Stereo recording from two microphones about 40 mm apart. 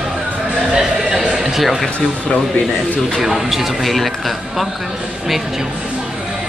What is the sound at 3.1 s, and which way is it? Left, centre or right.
Speech, centre.